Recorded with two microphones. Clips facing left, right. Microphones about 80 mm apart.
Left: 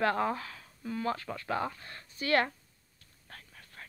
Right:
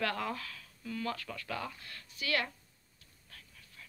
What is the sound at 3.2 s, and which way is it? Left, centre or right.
Whispering, left.